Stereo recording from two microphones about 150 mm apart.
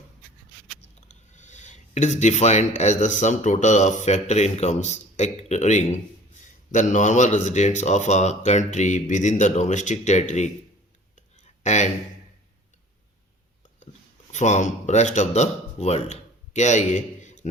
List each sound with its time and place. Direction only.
1.0 s speech: 55° left (ahead or behind)
11.6 s speech: 50° left (ahead or behind)
14.3 s speech: 50° left (ahead or behind)